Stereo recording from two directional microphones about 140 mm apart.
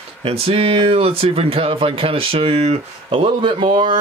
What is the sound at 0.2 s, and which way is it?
Speech, 45° right (ahead or behind).